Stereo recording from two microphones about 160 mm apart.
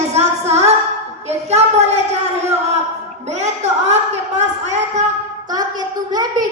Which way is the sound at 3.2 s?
45° right (ahead or behind).